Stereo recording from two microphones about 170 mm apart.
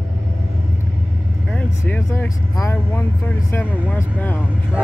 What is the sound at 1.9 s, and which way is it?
Speech, 15° left (ahead or behind).